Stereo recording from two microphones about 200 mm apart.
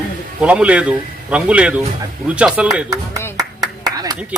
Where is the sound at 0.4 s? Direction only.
5° right (ahead or behind).